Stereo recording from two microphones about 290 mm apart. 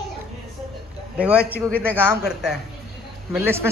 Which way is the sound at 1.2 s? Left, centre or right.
Centre.